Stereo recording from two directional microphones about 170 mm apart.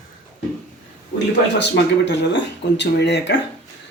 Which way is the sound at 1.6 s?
90° left.